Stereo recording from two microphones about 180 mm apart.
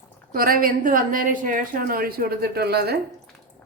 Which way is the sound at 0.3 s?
50° right (ahead or behind).